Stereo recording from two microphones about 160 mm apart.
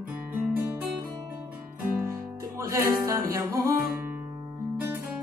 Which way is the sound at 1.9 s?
15° right (ahead or behind).